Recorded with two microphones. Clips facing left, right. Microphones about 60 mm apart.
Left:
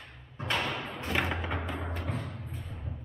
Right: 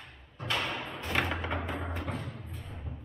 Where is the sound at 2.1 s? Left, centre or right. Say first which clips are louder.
Left 1 dB; left.